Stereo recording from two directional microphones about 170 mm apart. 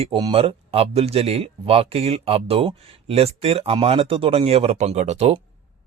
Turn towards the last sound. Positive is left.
turn(degrees=-40)  # may be behind; listen again after turning